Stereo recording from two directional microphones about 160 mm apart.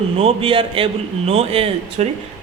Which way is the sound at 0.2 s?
35° right (ahead or behind).